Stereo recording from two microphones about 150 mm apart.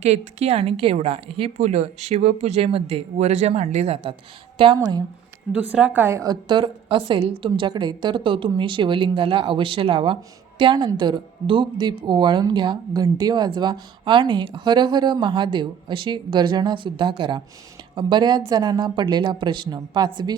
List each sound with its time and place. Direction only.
0.0 s a woman's voice: 45° right (ahead or behind); by 5.0 s 25° right (ahead or behind)
5.5 s speech: 10° right (ahead or behind)
6.5 s a woman's voice: 35° right (ahead or behind)